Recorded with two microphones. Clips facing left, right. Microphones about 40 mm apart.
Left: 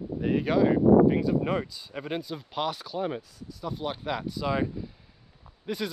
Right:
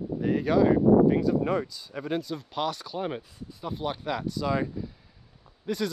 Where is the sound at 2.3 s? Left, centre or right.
Centre.